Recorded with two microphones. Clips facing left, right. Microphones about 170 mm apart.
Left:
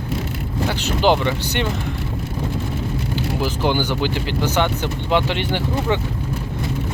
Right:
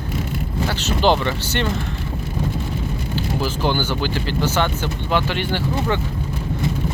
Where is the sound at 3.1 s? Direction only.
15° left (ahead or behind).